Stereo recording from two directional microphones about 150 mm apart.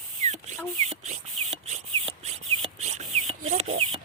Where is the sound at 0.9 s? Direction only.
45° right (ahead or behind).